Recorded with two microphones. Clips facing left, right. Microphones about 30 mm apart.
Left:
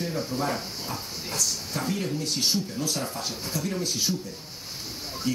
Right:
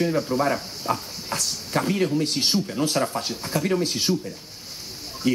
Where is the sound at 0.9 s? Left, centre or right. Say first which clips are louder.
Right 11 dB; right.